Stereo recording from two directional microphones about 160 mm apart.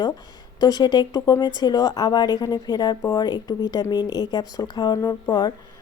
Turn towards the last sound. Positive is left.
turn(degrees=25)  # may be behind; listen again after turning